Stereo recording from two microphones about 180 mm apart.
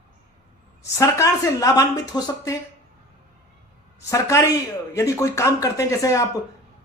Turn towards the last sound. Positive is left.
turn(degrees=15)  # may be behind; listen again after turning